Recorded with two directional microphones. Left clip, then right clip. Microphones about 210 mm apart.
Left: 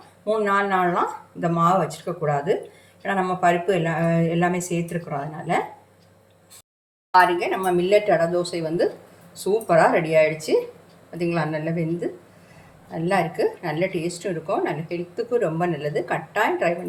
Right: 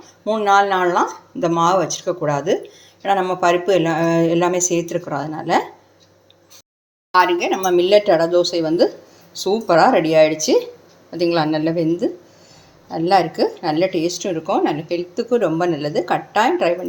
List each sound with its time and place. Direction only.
0.3 s a woman's voice: 40° right (ahead or behind)
7.1 s a woman's voice: 35° right (ahead or behind)